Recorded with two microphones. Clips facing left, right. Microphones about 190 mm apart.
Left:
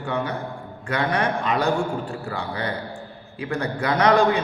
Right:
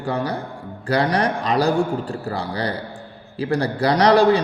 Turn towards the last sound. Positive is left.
turn(degrees=-35)  # may be behind; listen again after turning